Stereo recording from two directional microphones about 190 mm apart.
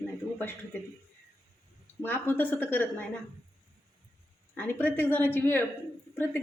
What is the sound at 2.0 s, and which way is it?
A woman's voice, 10° left (ahead or behind).